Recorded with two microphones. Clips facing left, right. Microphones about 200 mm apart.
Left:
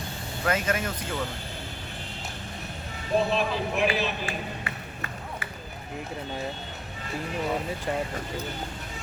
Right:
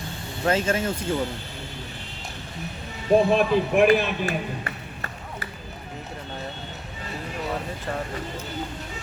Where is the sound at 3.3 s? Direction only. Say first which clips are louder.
Right 7 dB; 55° right (ahead or behind).